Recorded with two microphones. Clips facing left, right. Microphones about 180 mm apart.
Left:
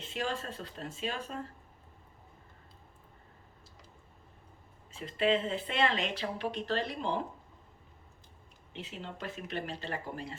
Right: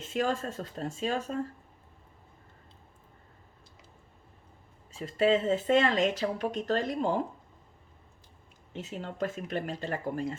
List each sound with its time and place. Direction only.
0.0 s speech: 45° right (ahead or behind)
4.9 s speech: 40° right (ahead or behind)
8.7 s speech: 45° right (ahead or behind)